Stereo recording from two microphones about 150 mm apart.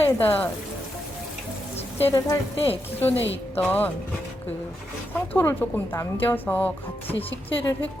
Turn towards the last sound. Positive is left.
turn(degrees=20)  # may be behind; listen again after turning